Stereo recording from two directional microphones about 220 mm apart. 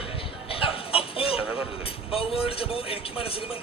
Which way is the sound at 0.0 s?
25° left (ahead or behind).